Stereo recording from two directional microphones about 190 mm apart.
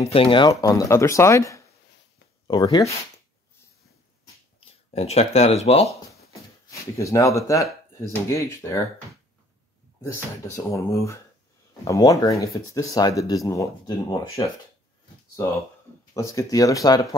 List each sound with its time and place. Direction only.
0.0 s speech: 30° left (ahead or behind)
4.6 s speech: 30° left (ahead or behind)
6.3 s speech: 15° left (ahead or behind)
10.0 s speech: 15° left (ahead or behind)
16.1 s speech: 15° left (ahead or behind)